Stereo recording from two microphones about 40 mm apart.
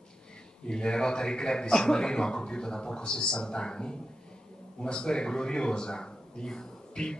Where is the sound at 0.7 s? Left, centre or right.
Left.